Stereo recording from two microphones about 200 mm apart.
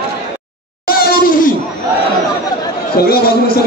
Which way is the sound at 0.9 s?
50° left (ahead or behind).